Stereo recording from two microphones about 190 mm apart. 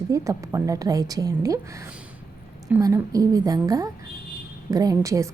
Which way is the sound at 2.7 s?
15° right (ahead or behind).